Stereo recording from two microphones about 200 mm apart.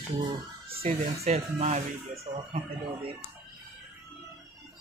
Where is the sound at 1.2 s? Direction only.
35° right (ahead or behind).